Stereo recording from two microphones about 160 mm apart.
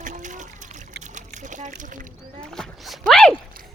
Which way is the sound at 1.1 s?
50° right (ahead or behind).